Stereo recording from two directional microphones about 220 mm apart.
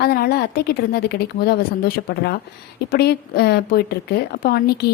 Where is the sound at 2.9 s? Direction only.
45° left (ahead or behind).